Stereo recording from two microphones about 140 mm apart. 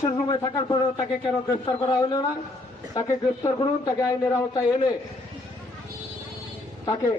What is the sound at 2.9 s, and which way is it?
A man's voice, 25° left (ahead or behind).